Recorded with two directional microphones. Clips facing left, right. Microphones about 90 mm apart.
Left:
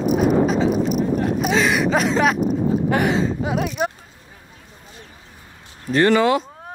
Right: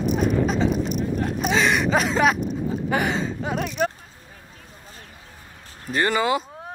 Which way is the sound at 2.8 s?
Centre (ahead or behind).